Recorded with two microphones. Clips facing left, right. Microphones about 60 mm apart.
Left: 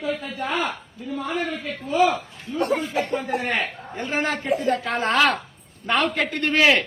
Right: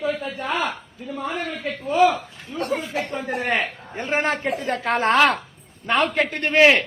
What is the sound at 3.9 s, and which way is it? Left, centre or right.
A man's voice, right.